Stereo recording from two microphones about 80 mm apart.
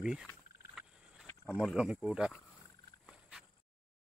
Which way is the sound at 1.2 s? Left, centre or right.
Left.